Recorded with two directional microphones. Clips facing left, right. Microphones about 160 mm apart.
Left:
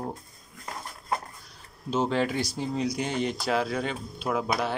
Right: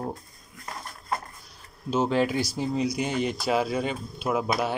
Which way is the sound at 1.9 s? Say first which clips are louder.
Right 2 dB; 10° right (ahead or behind).